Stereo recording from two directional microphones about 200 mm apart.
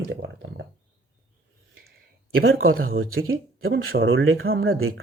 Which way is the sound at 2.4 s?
90° right.